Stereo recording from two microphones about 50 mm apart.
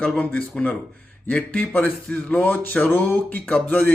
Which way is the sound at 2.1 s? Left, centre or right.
Left.